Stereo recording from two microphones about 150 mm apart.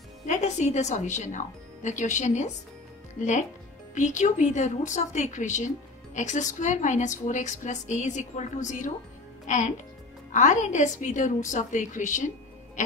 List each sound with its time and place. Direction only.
0.3 s a woman's voice: 50° left (ahead or behind)
3.9 s a woman's voice: 55° left (ahead or behind)
10.3 s a woman's voice: 55° left (ahead or behind)